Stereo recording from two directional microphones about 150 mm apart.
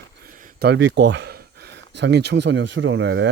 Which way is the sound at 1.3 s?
90° right.